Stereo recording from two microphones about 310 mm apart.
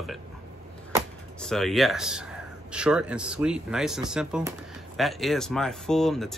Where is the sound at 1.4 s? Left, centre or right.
Centre.